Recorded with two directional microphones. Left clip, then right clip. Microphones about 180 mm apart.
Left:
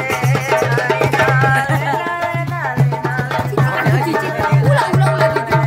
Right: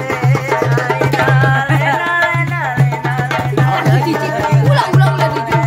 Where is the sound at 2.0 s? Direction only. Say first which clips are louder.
Right 6 dB; 55° right (ahead or behind).